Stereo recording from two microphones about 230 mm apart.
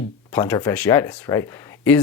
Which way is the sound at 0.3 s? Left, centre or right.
Centre.